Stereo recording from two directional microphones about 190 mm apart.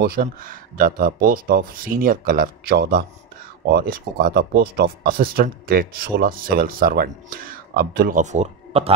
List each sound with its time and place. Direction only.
0.0 s speech: 50° right (ahead or behind); by 8.9 s 35° right (ahead or behind)